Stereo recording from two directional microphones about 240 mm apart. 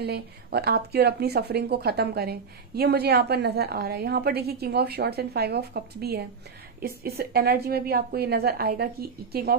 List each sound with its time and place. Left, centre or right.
0.0 s speech: right